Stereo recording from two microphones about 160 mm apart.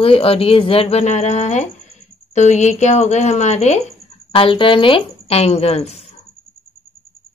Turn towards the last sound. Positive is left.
turn(degrees=40)  # may be behind; listen again after turning